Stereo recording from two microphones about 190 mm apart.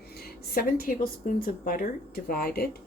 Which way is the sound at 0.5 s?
50° left (ahead or behind).